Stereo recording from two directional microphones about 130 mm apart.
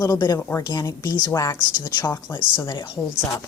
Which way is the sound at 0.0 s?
30° left (ahead or behind).